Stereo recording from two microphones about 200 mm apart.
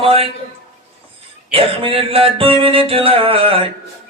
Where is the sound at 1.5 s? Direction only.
25° right (ahead or behind).